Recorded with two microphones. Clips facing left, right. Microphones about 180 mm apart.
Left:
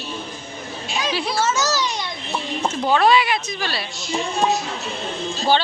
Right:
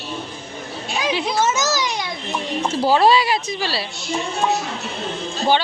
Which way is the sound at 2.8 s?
30° right (ahead or behind).